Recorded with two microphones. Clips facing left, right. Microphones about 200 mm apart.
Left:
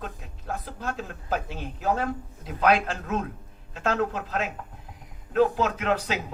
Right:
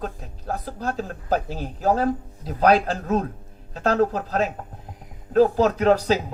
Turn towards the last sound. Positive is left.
turn(degrees=-35)  # may be behind; listen again after turning